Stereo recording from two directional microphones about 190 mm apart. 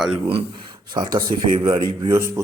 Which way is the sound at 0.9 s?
20° right (ahead or behind).